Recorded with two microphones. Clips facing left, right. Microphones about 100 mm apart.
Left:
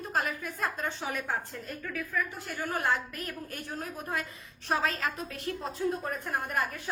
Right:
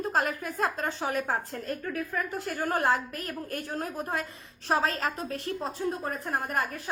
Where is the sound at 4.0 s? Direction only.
30° right (ahead or behind).